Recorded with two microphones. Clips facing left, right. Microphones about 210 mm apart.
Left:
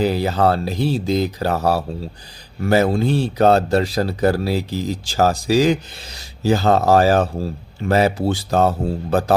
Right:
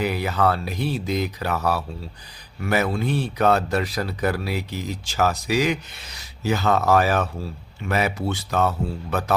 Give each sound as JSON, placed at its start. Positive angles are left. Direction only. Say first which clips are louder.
{"t": 0.0, "sound": "speech", "louder": "left 5 dB", "side_deg": 30}